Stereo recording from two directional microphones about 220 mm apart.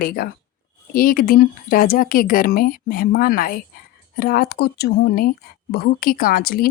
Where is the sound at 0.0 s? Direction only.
40° left (ahead or behind).